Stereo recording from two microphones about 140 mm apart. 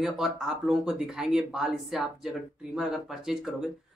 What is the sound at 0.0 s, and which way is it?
Speech, 5° right (ahead or behind).